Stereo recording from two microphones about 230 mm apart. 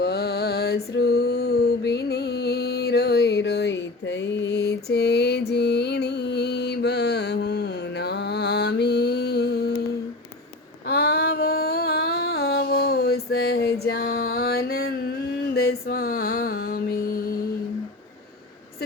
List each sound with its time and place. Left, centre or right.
0.0 s mantra: left
10.8 s a sound: left
15.5 s mantra: left